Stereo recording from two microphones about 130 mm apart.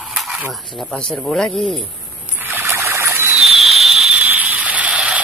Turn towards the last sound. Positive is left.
turn(degrees=-10)  # may be behind; listen again after turning